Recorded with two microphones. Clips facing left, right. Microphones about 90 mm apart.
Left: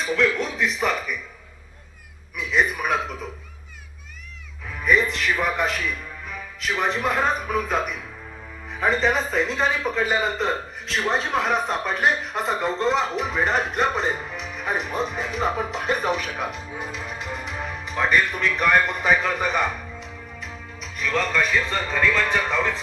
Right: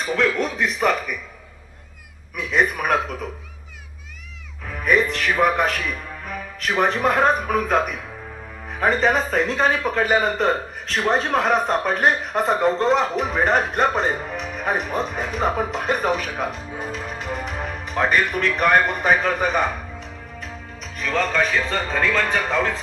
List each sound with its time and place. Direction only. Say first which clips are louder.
0.0 s speech: right 1 dB; 50° right (ahead or behind)
2.3 s speech: right 2 dB; 55° right (ahead or behind)
4.7 s speech: right 1 dB; 55° right (ahead or behind)
21.8 s speech: right 1 dB; 45° right (ahead or behind)